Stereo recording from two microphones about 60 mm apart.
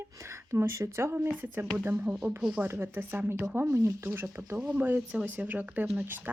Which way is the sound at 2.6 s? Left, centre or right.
Right.